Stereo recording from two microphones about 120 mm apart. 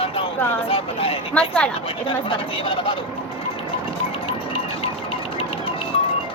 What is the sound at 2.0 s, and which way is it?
Speech, 45° left (ahead or behind).